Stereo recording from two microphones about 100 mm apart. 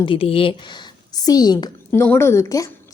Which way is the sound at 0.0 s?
60° left (ahead or behind).